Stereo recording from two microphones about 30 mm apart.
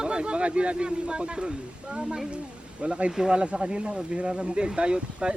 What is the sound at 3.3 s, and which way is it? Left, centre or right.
Speech, right.